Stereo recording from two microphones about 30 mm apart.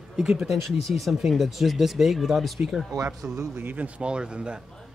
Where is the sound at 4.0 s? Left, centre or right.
Right.